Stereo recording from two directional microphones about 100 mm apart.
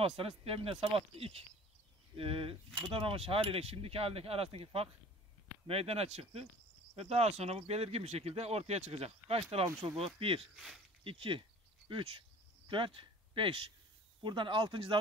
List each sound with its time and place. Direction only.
0.0 s speech: 70° right (ahead or behind)
0.9 s speech: 80° right
2.1 s speech: 65° right (ahead or behind)
5.7 s speech: 85° right
9.9 s speech: 70° right (ahead or behind)
10.4 s speech: centre (ahead or behind)
11.1 s speech: 60° right (ahead or behind)
11.9 s cricket: 55° right (ahead or behind)
14.2 s speech: 55° right (ahead or behind)